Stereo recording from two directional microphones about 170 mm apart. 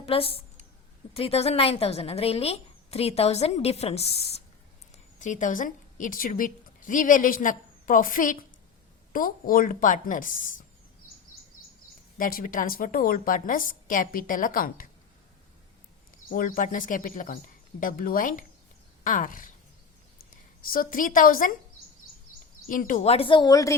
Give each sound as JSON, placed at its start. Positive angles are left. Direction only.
{"t": 0.0, "sound": "a sound", "side_deg": 35}
{"t": 1.1, "sound": "speech", "side_deg": 35}
{"t": 5.2, "sound": "a woman's voice", "side_deg": 50}
{"t": 12.1, "sound": "a woman's voice", "side_deg": 55}
{"t": 16.3, "sound": "speech", "side_deg": 55}
{"t": 19.0, "sound": "a sound", "side_deg": 55}
{"t": 20.3, "sound": "a woman's voice", "side_deg": 55}
{"t": 22.6, "sound": "a woman's voice", "side_deg": 55}
{"t": 23.0, "sound": "speech", "side_deg": 35}